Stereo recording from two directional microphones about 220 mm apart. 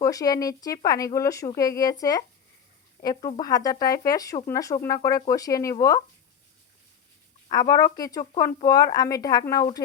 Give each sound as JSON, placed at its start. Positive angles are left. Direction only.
{"t": 0.0, "sound": "speech", "side_deg": 15}
{"t": 7.4, "sound": "speech", "side_deg": 15}